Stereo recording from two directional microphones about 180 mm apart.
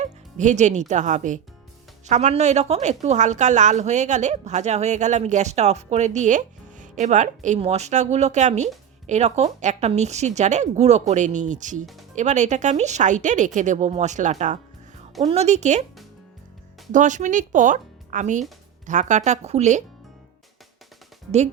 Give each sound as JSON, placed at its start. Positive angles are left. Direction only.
{"t": 0.0, "sound": "a woman's voice", "side_deg": -40}
{"t": 16.9, "sound": "a woman's voice", "side_deg": -45}